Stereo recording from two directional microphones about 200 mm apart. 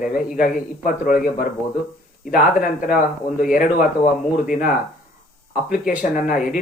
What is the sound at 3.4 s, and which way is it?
A man's voice, 45° left (ahead or behind).